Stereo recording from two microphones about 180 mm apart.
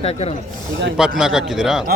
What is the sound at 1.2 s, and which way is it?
Speech, 5° right (ahead or behind).